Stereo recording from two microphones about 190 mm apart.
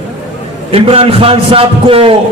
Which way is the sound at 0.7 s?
30° right (ahead or behind).